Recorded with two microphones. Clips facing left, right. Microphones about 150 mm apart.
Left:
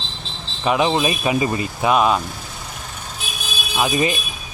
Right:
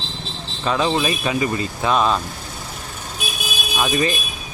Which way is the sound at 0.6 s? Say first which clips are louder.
Left 2 dB; 20° left (ahead or behind).